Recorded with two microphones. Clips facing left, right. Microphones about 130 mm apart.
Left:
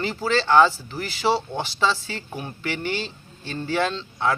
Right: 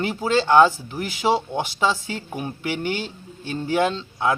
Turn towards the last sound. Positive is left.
turn(degrees=-10)  # may be behind; listen again after turning